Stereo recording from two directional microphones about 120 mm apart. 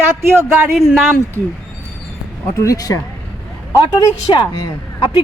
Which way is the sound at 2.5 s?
25° left (ahead or behind).